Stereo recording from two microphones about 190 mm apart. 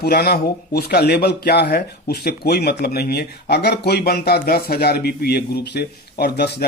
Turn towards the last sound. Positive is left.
turn(degrees=55)  # may be behind; listen again after turning